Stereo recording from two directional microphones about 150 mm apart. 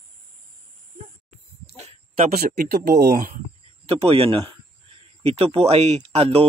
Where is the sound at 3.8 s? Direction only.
40° right (ahead or behind).